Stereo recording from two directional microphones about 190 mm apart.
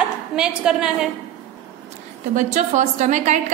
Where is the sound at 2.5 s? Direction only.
40° right (ahead or behind).